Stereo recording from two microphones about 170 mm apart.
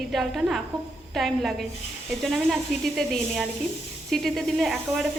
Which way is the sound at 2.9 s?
Centre (ahead or behind).